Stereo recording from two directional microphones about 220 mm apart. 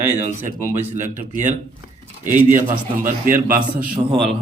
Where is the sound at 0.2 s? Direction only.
30° right (ahead or behind).